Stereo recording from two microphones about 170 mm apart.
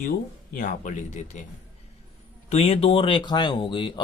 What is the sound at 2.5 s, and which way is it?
Speech, 35° left (ahead or behind).